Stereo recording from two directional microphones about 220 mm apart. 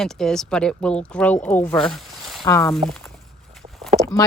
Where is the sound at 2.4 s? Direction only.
15° left (ahead or behind).